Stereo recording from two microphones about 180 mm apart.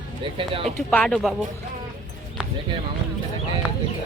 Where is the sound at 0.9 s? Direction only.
5° left (ahead or behind).